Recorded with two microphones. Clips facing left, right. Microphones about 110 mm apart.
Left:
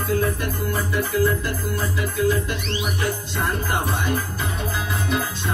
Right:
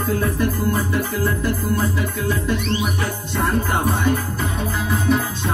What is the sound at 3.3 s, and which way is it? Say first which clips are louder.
Music: right 7 dB; 45° right (ahead or behind).